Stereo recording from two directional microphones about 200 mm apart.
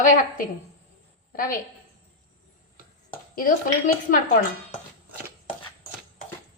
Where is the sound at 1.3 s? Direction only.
45° left (ahead or behind).